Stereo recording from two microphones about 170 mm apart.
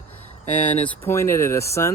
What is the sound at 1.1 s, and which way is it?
Speech, 15° left (ahead or behind).